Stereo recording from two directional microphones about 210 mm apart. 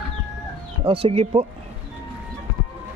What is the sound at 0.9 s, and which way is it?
Speech, 25° right (ahead or behind).